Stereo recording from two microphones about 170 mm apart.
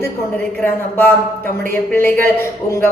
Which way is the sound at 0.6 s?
15° left (ahead or behind).